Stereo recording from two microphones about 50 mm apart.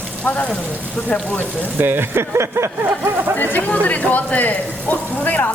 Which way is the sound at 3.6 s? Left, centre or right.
Left.